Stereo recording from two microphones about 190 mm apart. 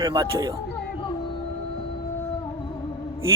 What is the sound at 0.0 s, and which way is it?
Speech, 20° right (ahead or behind).